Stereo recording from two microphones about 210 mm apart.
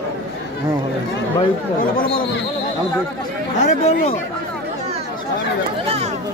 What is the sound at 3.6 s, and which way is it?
Speech, 30° left (ahead or behind).